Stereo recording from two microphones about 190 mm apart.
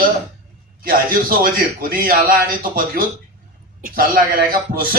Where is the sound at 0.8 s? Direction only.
50° right (ahead or behind).